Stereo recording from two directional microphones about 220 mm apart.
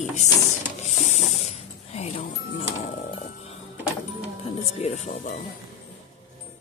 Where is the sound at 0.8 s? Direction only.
30° left (ahead or behind).